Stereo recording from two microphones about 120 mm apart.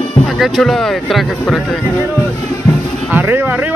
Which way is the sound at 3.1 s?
20° right (ahead or behind).